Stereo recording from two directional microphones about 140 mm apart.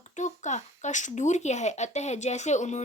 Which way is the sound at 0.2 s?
55° left (ahead or behind).